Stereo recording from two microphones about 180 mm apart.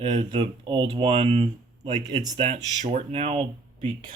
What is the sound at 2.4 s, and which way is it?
Speech, 35° right (ahead or behind).